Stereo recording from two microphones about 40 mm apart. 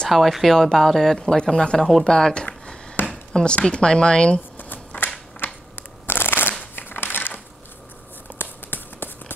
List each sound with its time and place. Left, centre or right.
0.1 s speech: centre
0.6 s speech: centre
1.3 s speech: centre
1.8 s speech: centre
2.0 s speech: centre
2.4 s a sound: left
3.3 s speech: left
4.4 s a sound: left
5.4 s shuffling cards: left
6.6 s crumpling: left
8.4 s a sound: left